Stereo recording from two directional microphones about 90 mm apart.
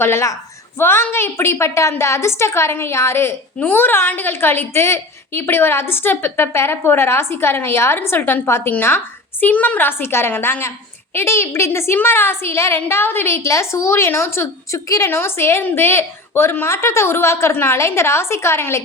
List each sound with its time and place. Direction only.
0.0 s a woman's voice: 30° left (ahead or behind)